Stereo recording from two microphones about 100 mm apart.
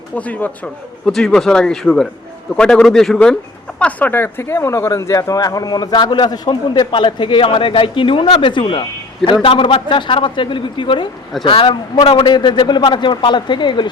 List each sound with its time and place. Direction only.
0.2 s speech: 15° left (ahead or behind)
1.0 s speech: 5° left (ahead or behind)
3.8 s speech: 15° left (ahead or behind); by 11.8 s 60° left (ahead or behind)
12.1 s speech: 45° left (ahead or behind)